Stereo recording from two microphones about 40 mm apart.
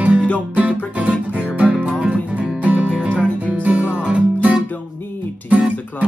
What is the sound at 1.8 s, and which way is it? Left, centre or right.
Music, right.